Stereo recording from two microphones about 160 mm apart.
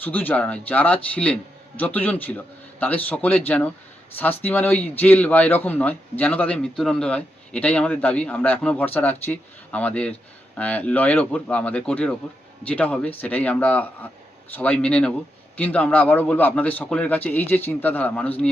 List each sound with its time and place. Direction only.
0.0 s a man's voice: 10° left (ahead or behind)